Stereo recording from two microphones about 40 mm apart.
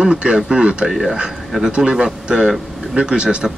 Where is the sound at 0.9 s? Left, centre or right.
Centre.